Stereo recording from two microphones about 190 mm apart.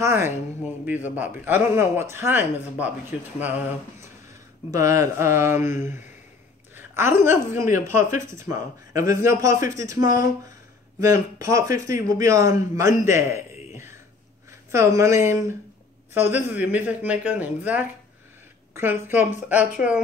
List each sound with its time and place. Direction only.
0.0 s speech: 15° right (ahead or behind)
4.7 s a woman's voice: 15° right (ahead or behind)
13.0 s a sound: 15° right (ahead or behind)
14.7 s speech: 15° right (ahead or behind)